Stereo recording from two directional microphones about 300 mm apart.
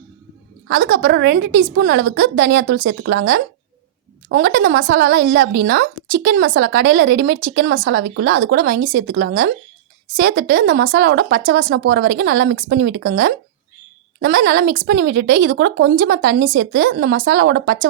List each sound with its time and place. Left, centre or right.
0.7 s speech: right